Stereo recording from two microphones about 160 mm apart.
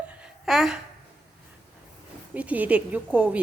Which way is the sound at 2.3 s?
10° right (ahead or behind).